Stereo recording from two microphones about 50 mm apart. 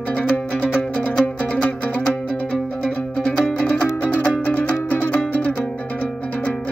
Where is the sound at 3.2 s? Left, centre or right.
Left.